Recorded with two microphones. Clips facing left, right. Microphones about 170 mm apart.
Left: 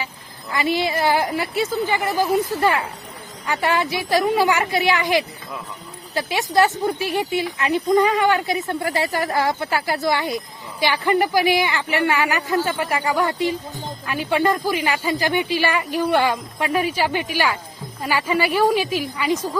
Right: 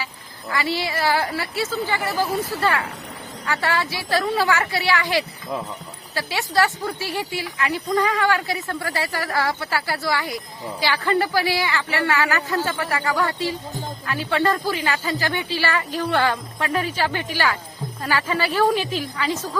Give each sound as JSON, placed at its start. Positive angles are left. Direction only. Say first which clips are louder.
{"t": 0.5, "sound": "speech", "louder": "left 3 dB", "side_deg": 20}